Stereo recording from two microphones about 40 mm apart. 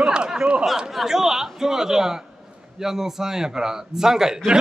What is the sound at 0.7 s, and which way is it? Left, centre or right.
A man's voice, centre.